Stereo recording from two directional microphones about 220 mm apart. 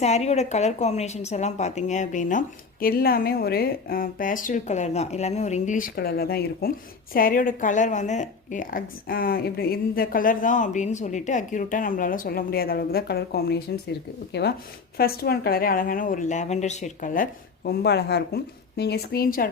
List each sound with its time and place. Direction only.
0.0 s speech: 30° left (ahead or behind)